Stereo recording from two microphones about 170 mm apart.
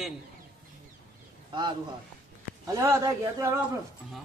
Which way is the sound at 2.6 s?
20° right (ahead or behind).